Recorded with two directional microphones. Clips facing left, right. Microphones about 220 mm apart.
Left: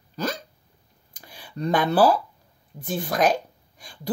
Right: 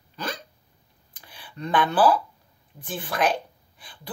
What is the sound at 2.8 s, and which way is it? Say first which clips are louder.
Speech: left 3 dB; 40° left (ahead or behind).